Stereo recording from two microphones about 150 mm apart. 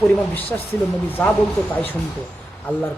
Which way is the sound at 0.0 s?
10° left (ahead or behind).